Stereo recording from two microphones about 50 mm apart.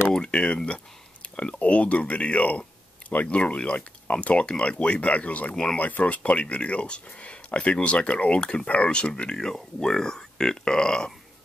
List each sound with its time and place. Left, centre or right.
0.1 s a sound: centre
1.3 s speech: left
3.3 s speech: left